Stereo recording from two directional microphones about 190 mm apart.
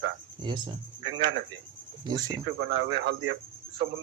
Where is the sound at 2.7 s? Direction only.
65° right (ahead or behind).